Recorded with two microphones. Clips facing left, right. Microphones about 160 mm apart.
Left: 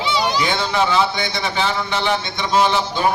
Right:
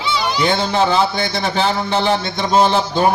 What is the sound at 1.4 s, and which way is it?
A man's voice, 35° right (ahead or behind).